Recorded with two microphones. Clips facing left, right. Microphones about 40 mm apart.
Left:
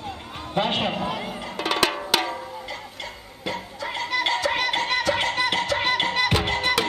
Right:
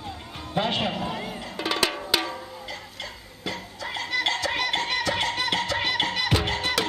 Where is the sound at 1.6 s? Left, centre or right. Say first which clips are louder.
Left 3 dB; left.